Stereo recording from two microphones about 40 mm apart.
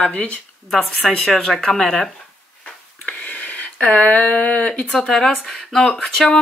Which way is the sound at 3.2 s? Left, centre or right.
Left.